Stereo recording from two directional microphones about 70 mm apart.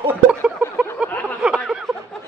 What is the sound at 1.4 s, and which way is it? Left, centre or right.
Snicker, centre.